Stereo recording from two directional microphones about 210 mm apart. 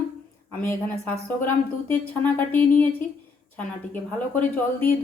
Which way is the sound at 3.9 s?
10° left (ahead or behind).